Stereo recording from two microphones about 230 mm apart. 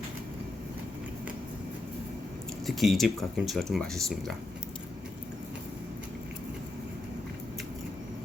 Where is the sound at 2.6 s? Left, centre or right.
Centre.